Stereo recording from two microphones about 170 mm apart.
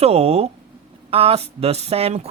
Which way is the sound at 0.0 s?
35° right (ahead or behind).